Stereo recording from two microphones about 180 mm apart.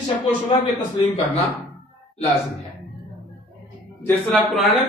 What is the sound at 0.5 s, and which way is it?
Speech, 25° left (ahead or behind).